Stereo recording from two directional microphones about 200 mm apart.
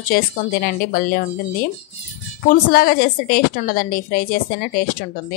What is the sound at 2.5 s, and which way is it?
A woman's voice, 45° left (ahead or behind).